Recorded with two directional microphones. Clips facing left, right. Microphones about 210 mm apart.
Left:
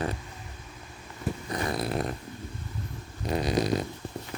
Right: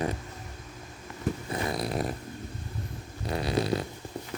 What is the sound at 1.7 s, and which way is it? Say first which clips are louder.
Dog: left 1 dB; centre (ahead or behind).